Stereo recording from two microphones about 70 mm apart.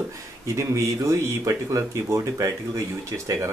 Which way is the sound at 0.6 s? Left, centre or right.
Right.